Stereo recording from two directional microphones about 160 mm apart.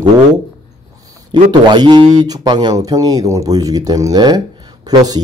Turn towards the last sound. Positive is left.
turn(degrees=-25)  # may be behind; listen again after turning